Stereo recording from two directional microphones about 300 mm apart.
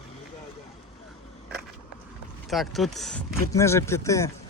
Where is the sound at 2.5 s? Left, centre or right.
Centre.